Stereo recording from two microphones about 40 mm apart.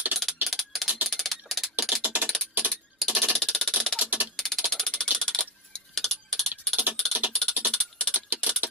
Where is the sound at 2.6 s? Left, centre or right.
Right.